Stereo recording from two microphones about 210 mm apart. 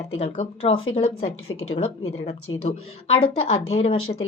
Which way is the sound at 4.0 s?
80° left.